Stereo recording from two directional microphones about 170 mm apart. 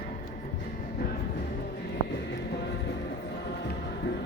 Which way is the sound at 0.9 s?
60° left (ahead or behind).